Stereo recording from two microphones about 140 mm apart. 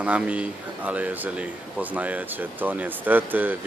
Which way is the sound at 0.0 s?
10° right (ahead or behind).